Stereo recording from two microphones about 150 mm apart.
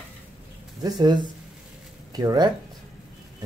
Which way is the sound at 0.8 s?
25° right (ahead or behind).